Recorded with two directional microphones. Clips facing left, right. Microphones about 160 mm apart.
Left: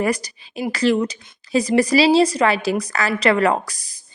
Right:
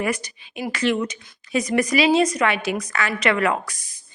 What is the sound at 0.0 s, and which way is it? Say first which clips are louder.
A woman's voice: left 4 dB; 35° left (ahead or behind).